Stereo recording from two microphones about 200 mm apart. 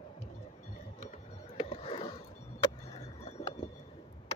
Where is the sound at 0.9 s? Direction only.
35° left (ahead or behind).